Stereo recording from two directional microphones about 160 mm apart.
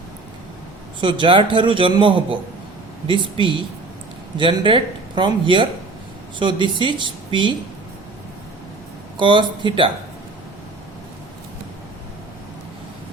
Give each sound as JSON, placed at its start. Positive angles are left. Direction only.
{"t": 1.0, "sound": "a man's voice", "side_deg": -30}
{"t": 9.1, "sound": "a man's voice", "side_deg": -30}